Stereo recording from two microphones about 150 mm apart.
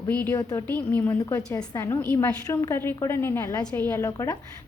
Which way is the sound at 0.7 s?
10° left (ahead or behind).